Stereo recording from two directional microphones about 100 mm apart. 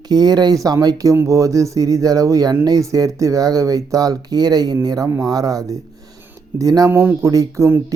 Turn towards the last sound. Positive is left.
turn(degrees=-30)  # may be behind; listen again after turning